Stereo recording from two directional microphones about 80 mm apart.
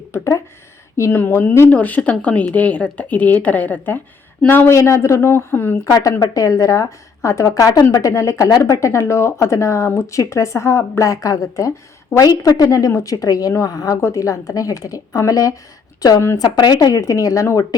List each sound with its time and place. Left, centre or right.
0.1 s speech: left
4.7 s speech: left
5.8 s a woman's voice: left
7.9 s a woman's voice: left